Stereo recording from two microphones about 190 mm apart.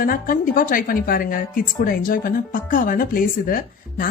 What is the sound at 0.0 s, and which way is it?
Speech, 50° left (ahead or behind).